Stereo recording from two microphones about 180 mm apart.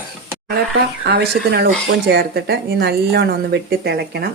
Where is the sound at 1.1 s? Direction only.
65° right (ahead or behind).